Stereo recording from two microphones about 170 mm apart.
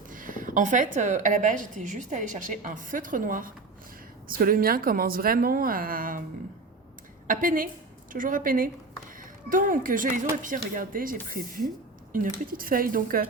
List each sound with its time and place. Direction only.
0.1 s a woman's voice: 50° right (ahead or behind)
7.3 s a woman's voice: 55° right (ahead or behind)